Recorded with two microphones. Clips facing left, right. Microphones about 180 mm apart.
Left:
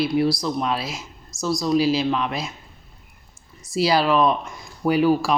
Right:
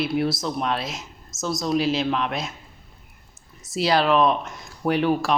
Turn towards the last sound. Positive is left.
turn(degrees=5)  # may be behind; listen again after turning